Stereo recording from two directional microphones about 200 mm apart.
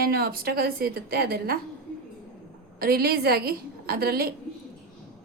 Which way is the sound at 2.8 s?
50° right (ahead or behind).